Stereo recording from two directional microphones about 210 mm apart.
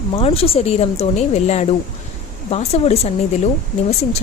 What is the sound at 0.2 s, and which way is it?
A woman's voice, 25° left (ahead or behind).